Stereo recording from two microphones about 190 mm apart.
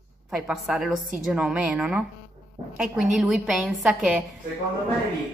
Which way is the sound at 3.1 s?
Centre (ahead or behind).